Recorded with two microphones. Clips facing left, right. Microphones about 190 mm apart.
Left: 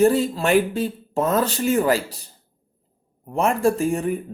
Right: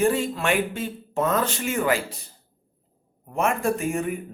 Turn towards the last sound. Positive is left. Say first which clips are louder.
# left 4 dB
turn(degrees=35)  # may be behind; listen again after turning